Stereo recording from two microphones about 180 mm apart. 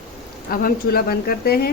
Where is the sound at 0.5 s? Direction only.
55° left (ahead or behind).